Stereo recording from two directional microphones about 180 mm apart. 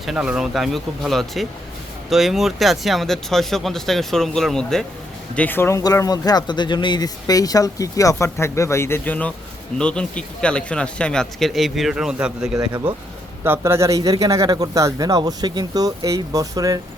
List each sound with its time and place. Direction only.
0.0 s speech: 5° right (ahead or behind)
12.5 s speech: 20° right (ahead or behind)